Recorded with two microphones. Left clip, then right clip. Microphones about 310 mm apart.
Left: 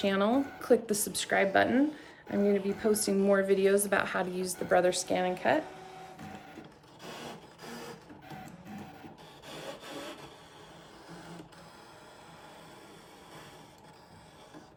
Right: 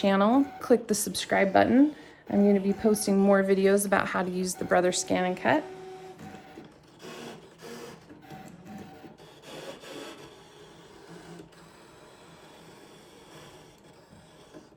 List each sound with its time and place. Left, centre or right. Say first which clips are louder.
0.0 s speech: right 5 dB; centre
7.0 s printer: right 1 dB; centre
9.5 s rub: right 1 dB; centre